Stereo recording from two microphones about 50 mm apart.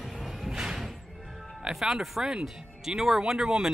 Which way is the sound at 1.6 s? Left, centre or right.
Centre.